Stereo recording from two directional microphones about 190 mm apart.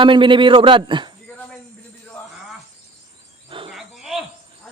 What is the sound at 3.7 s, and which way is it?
Wild animals, centre (ahead or behind).